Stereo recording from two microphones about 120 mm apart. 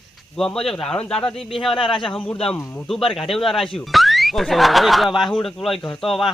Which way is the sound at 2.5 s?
20° left (ahead or behind).